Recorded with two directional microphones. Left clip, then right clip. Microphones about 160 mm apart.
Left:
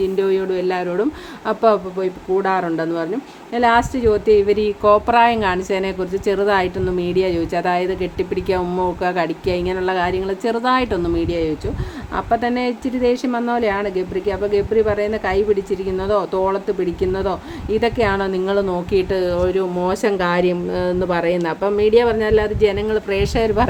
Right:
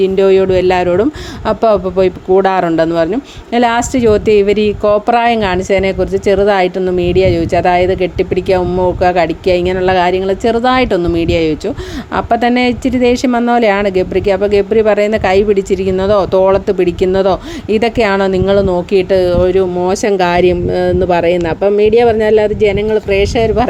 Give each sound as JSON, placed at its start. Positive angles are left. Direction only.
{"t": 0.0, "sound": "speech", "side_deg": -45}